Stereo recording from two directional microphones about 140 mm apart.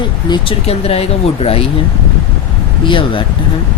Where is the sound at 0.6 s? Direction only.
45° left (ahead or behind).